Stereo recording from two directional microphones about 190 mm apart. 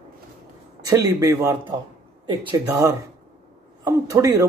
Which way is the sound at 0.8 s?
15° right (ahead or behind).